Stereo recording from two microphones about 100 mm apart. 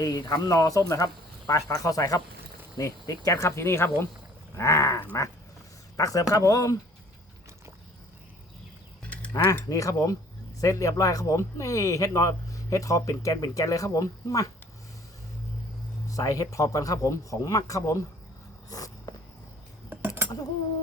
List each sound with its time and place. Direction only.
0.0 s speech: 35° left (ahead or behind)
4.5 s dog: 30° left (ahead or behind)
6.0 s speech: 35° left (ahead or behind)
9.6 s speech: 35° left (ahead or behind)
16.0 s speech: 35° left (ahead or behind)
18.7 s walk: 35° left (ahead or behind)
19.9 s cutlery: 20° right (ahead or behind)